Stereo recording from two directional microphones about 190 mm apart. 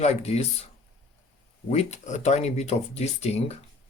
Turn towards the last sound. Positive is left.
turn(degrees=35)  # may be behind; listen again after turning